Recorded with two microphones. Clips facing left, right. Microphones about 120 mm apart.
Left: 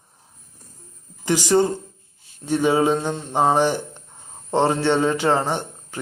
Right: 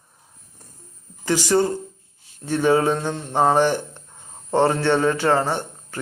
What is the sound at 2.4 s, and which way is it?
Speech, 15° left (ahead or behind).